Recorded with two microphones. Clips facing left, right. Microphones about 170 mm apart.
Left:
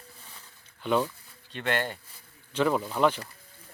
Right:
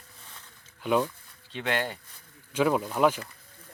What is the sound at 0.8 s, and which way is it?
Speech, 5° right (ahead or behind).